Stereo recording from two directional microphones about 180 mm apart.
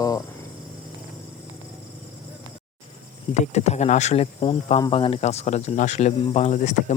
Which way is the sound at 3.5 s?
40° left (ahead or behind).